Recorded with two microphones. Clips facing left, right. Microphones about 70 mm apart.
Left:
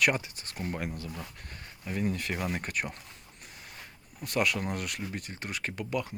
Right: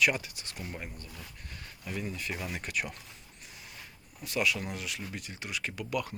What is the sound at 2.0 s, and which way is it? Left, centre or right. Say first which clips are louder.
Speech: left 6 dB; left.